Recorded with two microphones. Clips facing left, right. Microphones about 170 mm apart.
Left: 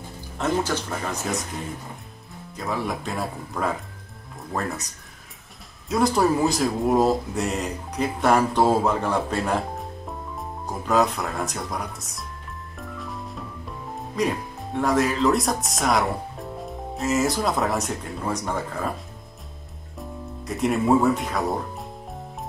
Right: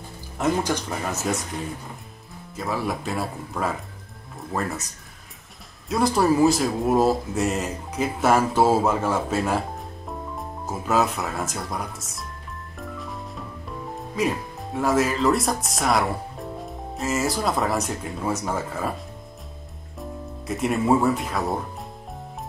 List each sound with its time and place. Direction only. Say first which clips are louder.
0.4 s speech: right 1 dB; 10° right (ahead or behind)
2.5 s speech: right 1 dB; centre (ahead or behind)
12.7 s music: right 1 dB; centre (ahead or behind)
14.1 s speech: even; 5° right (ahead or behind)
20.0 s speech: right 1 dB; centre (ahead or behind)